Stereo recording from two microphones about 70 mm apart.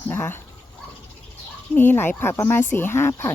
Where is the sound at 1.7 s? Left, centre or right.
Left.